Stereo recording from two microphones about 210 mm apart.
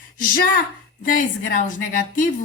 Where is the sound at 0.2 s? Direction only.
40° left (ahead or behind).